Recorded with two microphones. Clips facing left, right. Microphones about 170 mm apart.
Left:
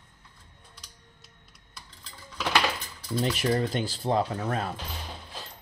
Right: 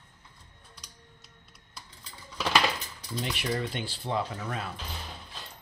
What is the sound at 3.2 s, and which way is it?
Speech, 40° left (ahead or behind).